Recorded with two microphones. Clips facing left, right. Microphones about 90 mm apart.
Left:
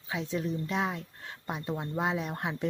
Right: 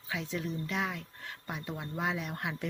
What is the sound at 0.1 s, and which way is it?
Speech, 25° left (ahead or behind).